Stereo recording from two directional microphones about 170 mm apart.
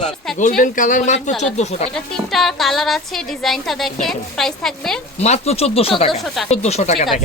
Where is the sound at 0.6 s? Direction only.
50° left (ahead or behind).